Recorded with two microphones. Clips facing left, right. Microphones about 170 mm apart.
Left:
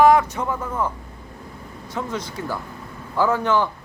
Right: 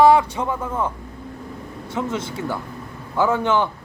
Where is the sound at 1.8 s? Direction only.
25° right (ahead or behind).